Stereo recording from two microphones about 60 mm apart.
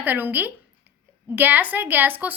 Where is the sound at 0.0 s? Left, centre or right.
Right.